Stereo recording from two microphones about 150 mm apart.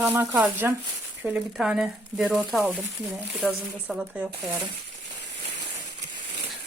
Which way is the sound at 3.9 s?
5° right (ahead or behind).